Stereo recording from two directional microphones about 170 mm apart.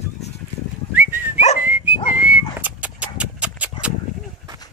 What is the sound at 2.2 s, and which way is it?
Horse, 10° right (ahead or behind).